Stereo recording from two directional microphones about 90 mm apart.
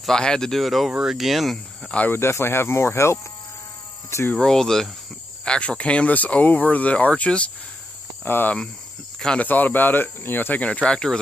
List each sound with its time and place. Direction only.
0.0 s speech: 10° left (ahead or behind)
1.9 s speech: 15° left (ahead or behind)
2.1 s speech: 30° left (ahead or behind)
4.4 s speech: 5° left (ahead or behind)